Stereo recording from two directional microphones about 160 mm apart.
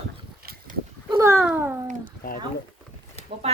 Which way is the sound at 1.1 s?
20° right (ahead or behind).